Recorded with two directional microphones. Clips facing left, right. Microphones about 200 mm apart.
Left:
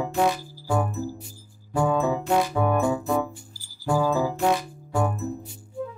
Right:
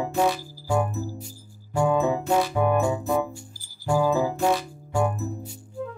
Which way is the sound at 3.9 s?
15° right (ahead or behind).